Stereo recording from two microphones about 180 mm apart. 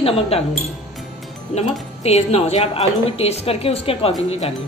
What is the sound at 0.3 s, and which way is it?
Speech, 35° left (ahead or behind).